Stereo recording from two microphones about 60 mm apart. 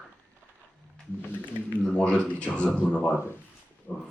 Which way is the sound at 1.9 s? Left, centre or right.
Centre.